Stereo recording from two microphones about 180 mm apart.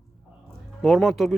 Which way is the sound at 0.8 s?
Centre (ahead or behind).